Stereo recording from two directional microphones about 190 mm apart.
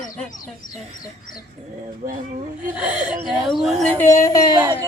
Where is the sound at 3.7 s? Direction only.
10° left (ahead or behind).